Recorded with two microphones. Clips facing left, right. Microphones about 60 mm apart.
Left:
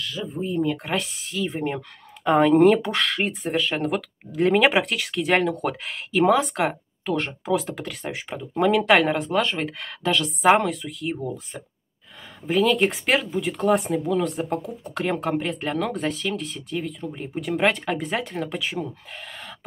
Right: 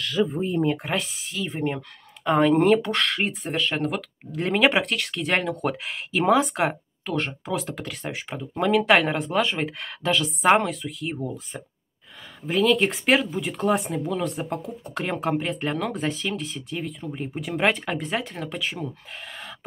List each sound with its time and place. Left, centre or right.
0.0 s speech: right
0.8 s speech: centre